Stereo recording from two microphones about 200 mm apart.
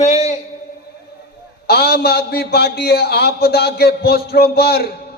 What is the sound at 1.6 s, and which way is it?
A man's voice, 55° left (ahead or behind).